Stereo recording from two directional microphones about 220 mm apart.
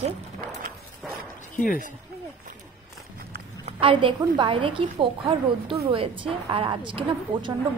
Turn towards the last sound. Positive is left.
turn(degrees=-20)  # may be behind; listen again after turning